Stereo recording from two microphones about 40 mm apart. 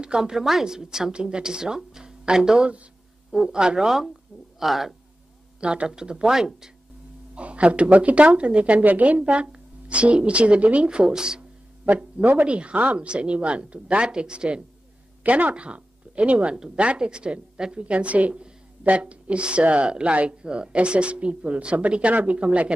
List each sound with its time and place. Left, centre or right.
0.0 s a woman's voice: centre
4.6 s speech: centre
5.6 s a woman's voice: right
7.3 s speech: right
11.8 s speech: right
12.7 s speech: right
13.0 s speech: right
15.2 s speech: right
17.8 s speech: right